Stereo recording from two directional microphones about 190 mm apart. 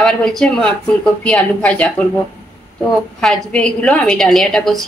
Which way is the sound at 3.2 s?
5° left (ahead or behind).